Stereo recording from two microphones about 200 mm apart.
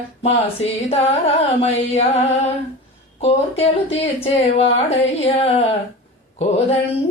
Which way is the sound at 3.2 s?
30° left (ahead or behind).